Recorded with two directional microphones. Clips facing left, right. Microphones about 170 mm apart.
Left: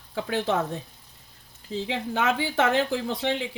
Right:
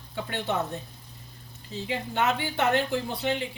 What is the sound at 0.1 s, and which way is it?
Speech, 90° left.